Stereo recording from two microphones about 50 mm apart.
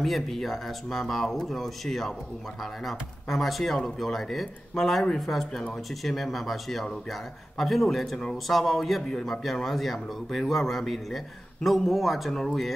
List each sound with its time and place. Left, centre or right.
0.0 s a man's voice: centre